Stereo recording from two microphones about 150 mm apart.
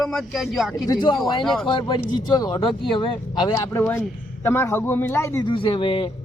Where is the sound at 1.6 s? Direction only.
35° left (ahead or behind).